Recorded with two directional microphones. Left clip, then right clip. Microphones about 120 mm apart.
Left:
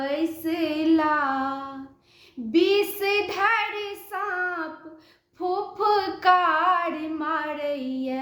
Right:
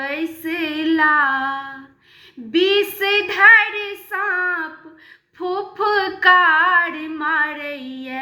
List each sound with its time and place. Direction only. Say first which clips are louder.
0.0 s female singing: right 2 dB; 40° left (ahead or behind)
2.5 s child singing: right 4 dB; 50° left (ahead or behind)
5.4 s female singing: right 3 dB; 50° left (ahead or behind)